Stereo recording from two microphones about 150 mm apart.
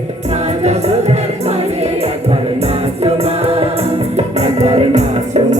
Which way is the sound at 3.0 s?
40° right (ahead or behind).